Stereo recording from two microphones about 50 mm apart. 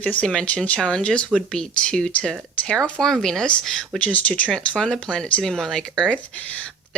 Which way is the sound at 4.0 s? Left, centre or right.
Left.